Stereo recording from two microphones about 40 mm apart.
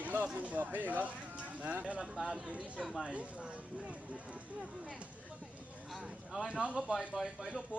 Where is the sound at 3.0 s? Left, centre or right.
Right.